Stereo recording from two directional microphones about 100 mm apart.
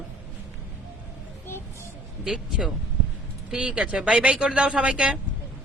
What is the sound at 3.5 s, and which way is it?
Speech, 10° right (ahead or behind).